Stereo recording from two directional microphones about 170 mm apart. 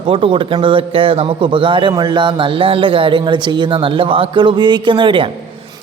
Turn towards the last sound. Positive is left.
turn(degrees=-30)  # may be behind; listen again after turning